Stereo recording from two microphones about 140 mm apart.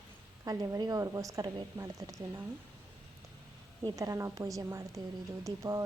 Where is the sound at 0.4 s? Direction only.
30° right (ahead or behind).